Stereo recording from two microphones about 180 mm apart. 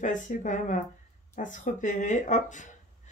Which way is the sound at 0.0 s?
45° left (ahead or behind).